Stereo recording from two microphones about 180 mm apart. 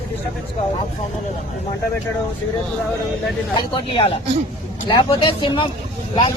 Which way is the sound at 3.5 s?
30° left (ahead or behind).